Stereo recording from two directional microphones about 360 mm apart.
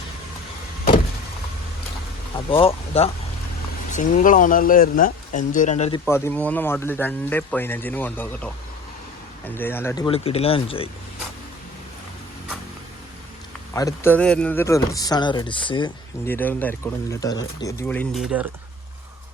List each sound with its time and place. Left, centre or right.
2.5 s speech: centre
6.1 s speech: centre
13.7 s speech: centre